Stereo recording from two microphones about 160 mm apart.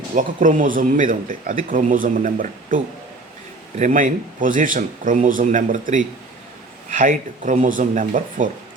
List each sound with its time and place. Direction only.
0.2 s speech: 55° right (ahead or behind)